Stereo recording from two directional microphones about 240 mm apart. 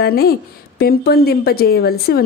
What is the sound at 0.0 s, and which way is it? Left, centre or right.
Speech, left.